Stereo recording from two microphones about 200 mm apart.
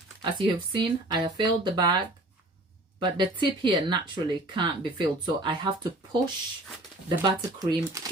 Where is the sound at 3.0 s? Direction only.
25° right (ahead or behind).